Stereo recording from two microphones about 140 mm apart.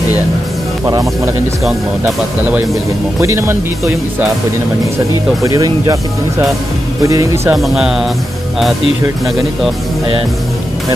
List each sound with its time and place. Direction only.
0.8 s speech: 25° right (ahead or behind)
3.2 s speech: 20° right (ahead or behind)
4.9 s speech: 25° right (ahead or behind)
7.5 s speech: 5° right (ahead or behind)